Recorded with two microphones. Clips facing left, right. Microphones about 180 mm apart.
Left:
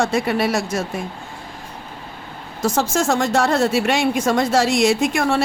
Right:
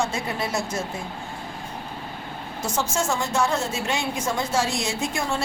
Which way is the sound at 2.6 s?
80° left.